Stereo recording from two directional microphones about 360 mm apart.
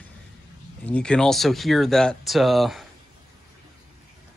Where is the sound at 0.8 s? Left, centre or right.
Centre.